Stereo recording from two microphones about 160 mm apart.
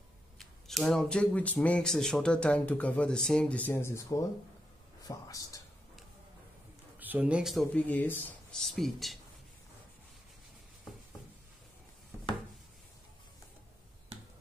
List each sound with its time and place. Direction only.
0.4 s speech: centre (ahead or behind); by 5.6 s 20° left (ahead or behind)
7.0 s a man's voice: 10° right (ahead or behind)
7.7 s speech: 10° left (ahead or behind)